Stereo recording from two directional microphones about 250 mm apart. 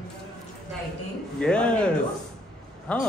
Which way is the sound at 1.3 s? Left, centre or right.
Centre.